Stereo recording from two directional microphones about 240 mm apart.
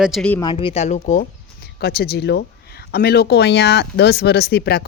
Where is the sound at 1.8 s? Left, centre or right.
Left.